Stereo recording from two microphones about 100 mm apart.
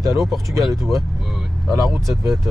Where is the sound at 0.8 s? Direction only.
Centre (ahead or behind).